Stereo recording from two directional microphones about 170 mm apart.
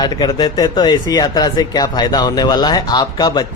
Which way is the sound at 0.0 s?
25° left (ahead or behind).